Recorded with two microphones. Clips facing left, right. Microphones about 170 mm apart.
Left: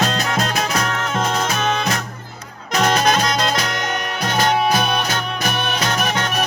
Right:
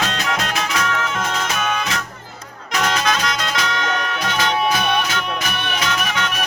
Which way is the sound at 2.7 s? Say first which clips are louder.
Left 4 dB; 45° left (ahead or behind).